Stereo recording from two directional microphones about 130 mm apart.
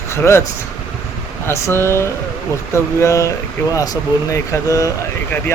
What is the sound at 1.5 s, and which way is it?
A man's voice, 20° left (ahead or behind).